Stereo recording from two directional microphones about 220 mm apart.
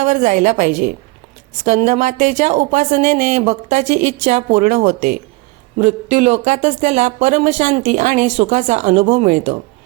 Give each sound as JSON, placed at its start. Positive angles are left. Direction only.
{"t": 0.0, "sound": "speech", "side_deg": -35}